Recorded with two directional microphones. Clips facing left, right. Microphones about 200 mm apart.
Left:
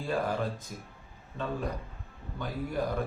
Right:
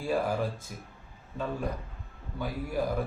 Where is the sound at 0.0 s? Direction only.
10° right (ahead or behind).